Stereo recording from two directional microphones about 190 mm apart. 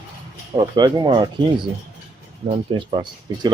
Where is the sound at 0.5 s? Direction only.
20° right (ahead or behind).